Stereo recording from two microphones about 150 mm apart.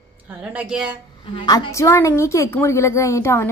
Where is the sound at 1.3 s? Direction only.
25° left (ahead or behind).